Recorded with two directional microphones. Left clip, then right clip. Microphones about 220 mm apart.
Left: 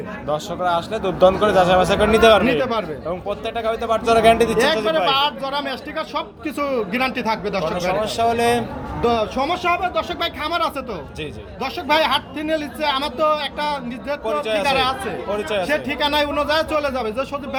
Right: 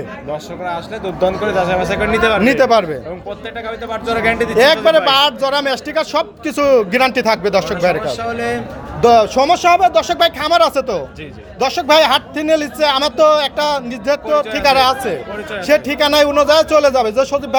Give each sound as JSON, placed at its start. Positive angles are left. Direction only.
{"t": 0.3, "sound": "a man's voice", "side_deg": 20}
{"t": 2.4, "sound": "speech", "side_deg": -45}
{"t": 3.2, "sound": "a man's voice", "side_deg": 15}
{"t": 4.5, "sound": "speech", "side_deg": -45}
{"t": 8.0, "sound": "speech", "side_deg": 20}
{"t": 9.0, "sound": "speech", "side_deg": -45}